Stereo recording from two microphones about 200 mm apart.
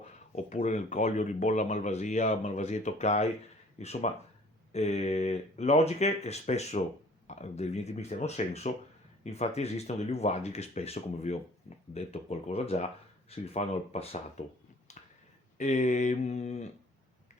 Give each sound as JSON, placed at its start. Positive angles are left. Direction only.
{"t": 0.0, "sound": "speech", "side_deg": 35}
{"t": 15.5, "sound": "speech", "side_deg": 35}